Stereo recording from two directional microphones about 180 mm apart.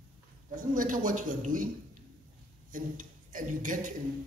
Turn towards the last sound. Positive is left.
turn(degrees=-45)  # may be behind; listen again after turning